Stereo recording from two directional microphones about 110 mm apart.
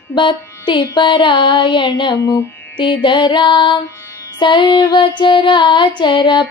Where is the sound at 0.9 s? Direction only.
45° left (ahead or behind).